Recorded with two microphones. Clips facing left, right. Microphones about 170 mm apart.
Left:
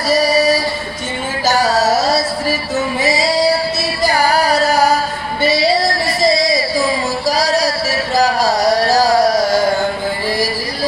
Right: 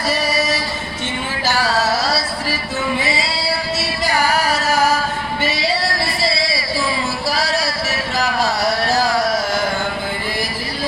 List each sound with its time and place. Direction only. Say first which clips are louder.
0.1 s singing: left 9 dB; 35° left (ahead or behind)
1.5 s music: left 5 dB; 40° left (ahead or behind)
3.0 s female singing: left 8 dB; 40° left (ahead or behind)
4.0 s singing: left 4 dB; 35° left (ahead or behind)
5.4 s music: left 8 dB; 35° left (ahead or behind)